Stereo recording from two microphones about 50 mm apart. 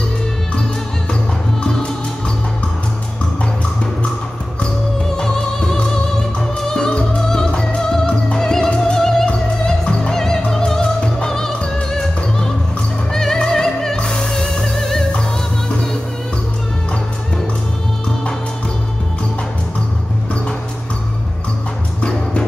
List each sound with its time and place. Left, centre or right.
1.6 s music: centre
5.1 s music: centre
13.1 s music: centre